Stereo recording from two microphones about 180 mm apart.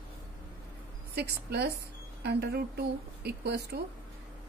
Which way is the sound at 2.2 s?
65° right (ahead or behind).